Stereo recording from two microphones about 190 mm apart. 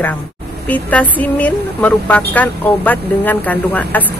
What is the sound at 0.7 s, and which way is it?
Speech, 10° left (ahead or behind).